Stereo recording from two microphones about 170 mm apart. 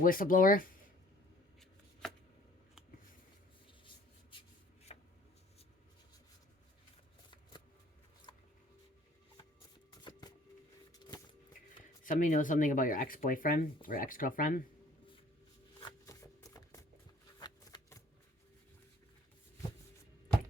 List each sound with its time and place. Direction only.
0.0 s speech: 55° left (ahead or behind)
1.5 s shuffling cards: centre (ahead or behind)
3.8 s rub: 30° left (ahead or behind)
10.0 s a sound: 25° left (ahead or behind)
10.9 s shuffling cards: 20° left (ahead or behind)
12.0 s speech: 50° left (ahead or behind)
15.8 s shuffling cards: 20° left (ahead or behind)